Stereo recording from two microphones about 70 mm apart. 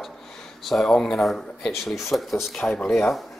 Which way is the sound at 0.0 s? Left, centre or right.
Centre.